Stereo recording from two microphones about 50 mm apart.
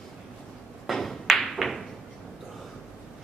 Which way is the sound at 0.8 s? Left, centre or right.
Centre.